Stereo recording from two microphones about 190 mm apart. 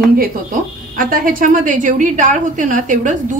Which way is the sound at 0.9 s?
45° right (ahead or behind).